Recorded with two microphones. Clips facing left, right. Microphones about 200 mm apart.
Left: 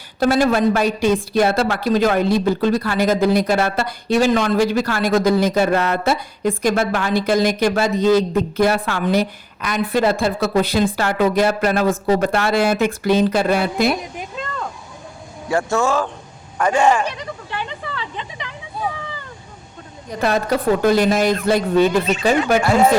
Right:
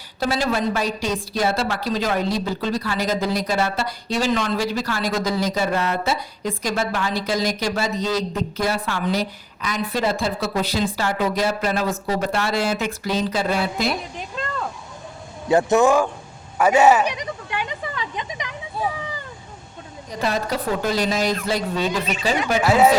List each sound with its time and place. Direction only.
0.2 s a woman's voice: 55° left (ahead or behind)
14.4 s a sound: 5° left (ahead or behind)
15.4 s speech: 20° right (ahead or behind)
20.2 s a woman's voice: 55° left (ahead or behind)
22.6 s speech: 5° right (ahead or behind)